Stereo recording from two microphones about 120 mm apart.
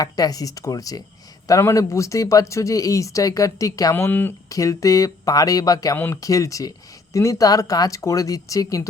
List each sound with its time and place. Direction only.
0.0 s speech: 30° left (ahead or behind)
3.9 s speech: 15° left (ahead or behind)
4.4 s speech: 30° left (ahead or behind)